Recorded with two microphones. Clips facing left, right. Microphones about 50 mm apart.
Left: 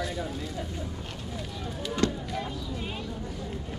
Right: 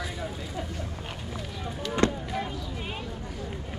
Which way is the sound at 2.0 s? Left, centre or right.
Right.